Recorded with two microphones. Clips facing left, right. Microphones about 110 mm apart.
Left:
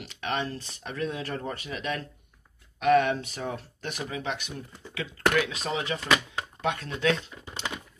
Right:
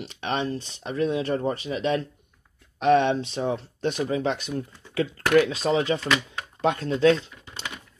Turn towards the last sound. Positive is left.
turn(degrees=-35)  # may be behind; listen again after turning